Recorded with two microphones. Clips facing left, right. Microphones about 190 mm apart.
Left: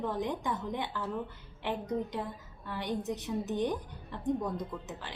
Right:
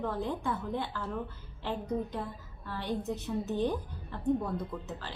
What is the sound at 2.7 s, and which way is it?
A woman's voice, 15° left (ahead or behind).